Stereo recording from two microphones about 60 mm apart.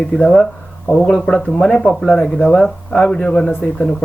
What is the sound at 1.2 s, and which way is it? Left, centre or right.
Speech, centre.